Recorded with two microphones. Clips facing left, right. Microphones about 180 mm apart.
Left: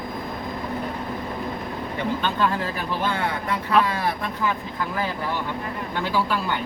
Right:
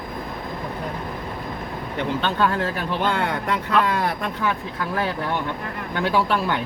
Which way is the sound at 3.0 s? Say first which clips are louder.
Right 3 dB; 65° right (ahead or behind).